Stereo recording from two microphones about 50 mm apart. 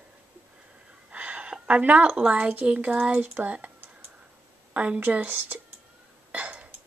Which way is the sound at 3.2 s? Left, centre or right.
Right.